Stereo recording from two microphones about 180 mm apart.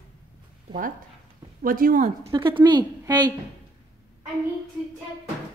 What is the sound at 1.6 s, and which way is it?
Speech, 50° right (ahead or behind).